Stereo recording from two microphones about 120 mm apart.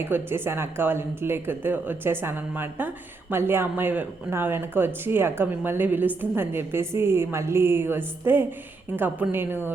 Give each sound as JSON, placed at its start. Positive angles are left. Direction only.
{"t": 0.0, "sound": "a woman's voice", "side_deg": -20}